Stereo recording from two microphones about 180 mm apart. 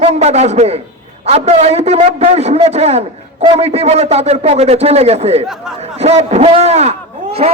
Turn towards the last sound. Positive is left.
turn(degrees=-35)  # may be behind; listen again after turning